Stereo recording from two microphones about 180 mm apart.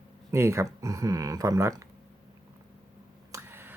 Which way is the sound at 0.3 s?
15° right (ahead or behind).